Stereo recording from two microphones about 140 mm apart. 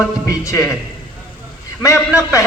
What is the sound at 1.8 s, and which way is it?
Speech, 20° left (ahead or behind).